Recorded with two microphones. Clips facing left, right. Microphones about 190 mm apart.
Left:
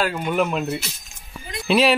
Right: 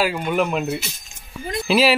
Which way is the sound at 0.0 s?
5° right (ahead or behind).